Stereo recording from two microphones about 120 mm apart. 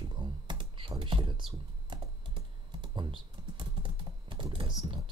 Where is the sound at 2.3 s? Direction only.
40° right (ahead or behind).